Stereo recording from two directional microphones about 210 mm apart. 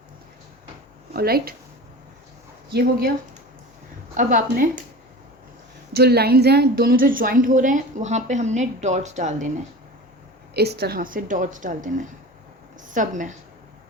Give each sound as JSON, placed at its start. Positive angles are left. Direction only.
{"t": 1.1, "sound": "speech", "side_deg": -45}
{"t": 4.1, "sound": "a woman's voice", "side_deg": -40}
{"t": 5.9, "sound": "a woman's voice", "side_deg": -50}
{"t": 10.5, "sound": "a woman's voice", "side_deg": -50}
{"t": 12.9, "sound": "a woman's voice", "side_deg": -35}